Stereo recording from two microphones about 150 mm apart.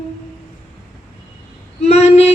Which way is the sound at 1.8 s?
45° left (ahead or behind).